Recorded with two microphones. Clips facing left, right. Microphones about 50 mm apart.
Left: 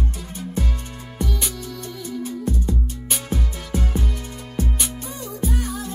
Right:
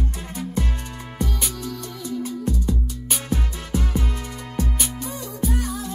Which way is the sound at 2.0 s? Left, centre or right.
Left.